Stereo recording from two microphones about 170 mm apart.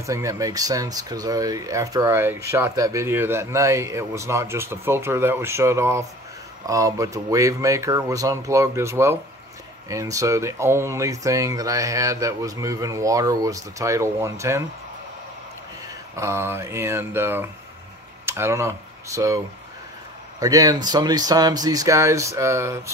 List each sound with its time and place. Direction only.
0.0 s speech: 20° right (ahead or behind)
16.2 s speech: 15° right (ahead or behind)